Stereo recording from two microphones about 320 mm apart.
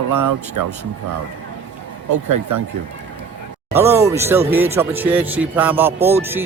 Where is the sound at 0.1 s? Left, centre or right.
Right.